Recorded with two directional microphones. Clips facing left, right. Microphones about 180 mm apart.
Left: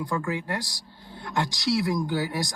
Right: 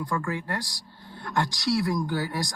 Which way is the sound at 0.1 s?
20° left (ahead or behind).